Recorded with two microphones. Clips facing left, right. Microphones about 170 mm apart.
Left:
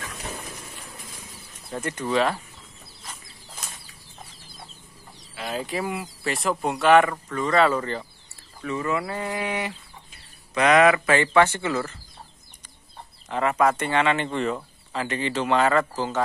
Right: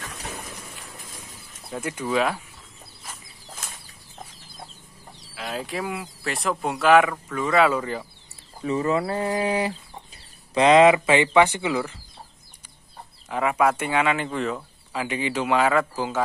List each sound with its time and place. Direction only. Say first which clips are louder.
1.7 s speech: even; 5° right (ahead or behind)
5.3 s speech: left 1 dB; centre (ahead or behind)
8.5 s speech: right 4 dB; 30° right (ahead or behind); by 12.0 s 10° right (ahead or behind)
13.3 s speech: even; 5° right (ahead or behind)